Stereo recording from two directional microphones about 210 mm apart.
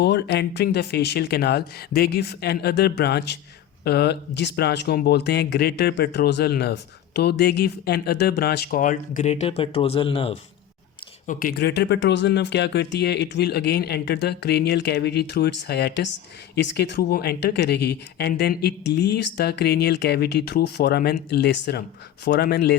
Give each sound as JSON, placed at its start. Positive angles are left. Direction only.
{"t": 0.0, "sound": "speech", "side_deg": 50}
{"t": 11.3, "sound": "speech", "side_deg": 40}